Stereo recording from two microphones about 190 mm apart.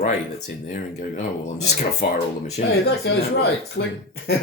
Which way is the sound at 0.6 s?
40° left (ahead or behind).